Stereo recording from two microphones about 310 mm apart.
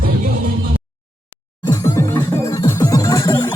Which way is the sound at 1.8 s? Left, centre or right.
Centre.